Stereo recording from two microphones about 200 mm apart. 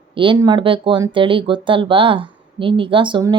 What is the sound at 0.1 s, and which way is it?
A woman's voice, 25° right (ahead or behind).